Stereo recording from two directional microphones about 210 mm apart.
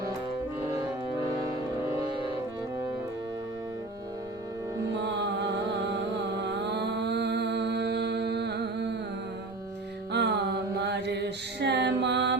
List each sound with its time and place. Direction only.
5.9 s music: 55° right (ahead or behind)
10.1 s music: 55° right (ahead or behind)
10.8 s mantra: 55° right (ahead or behind)